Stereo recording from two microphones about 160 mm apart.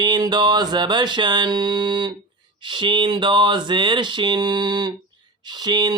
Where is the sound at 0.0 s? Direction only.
25° right (ahead or behind).